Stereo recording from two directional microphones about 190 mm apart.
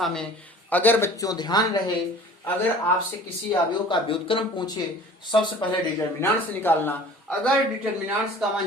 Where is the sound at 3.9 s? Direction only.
25° left (ahead or behind).